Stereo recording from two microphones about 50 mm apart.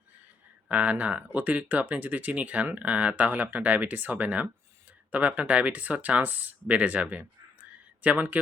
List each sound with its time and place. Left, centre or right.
0.7 s speech: right